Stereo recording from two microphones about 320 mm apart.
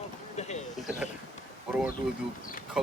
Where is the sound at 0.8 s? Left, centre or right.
Centre.